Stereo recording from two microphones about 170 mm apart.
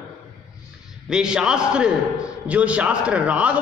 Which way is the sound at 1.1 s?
5° right (ahead or behind).